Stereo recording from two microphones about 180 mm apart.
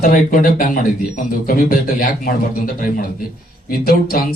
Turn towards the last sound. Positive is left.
turn(degrees=55)  # may be behind; listen again after turning